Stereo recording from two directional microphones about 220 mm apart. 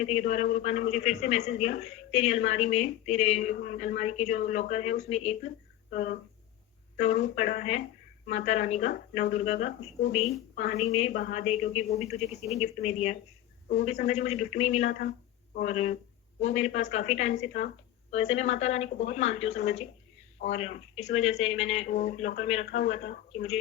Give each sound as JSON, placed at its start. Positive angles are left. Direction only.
{"t": 0.0, "sound": "a woman's voice", "side_deg": 30}
{"t": 5.9, "sound": "a woman's voice", "side_deg": 40}